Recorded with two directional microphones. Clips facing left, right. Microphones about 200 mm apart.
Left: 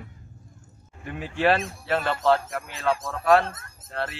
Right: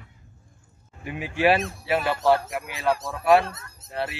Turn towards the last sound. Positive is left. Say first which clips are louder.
# right 1 dB
turn(degrees=-10)  # may be behind; listen again after turning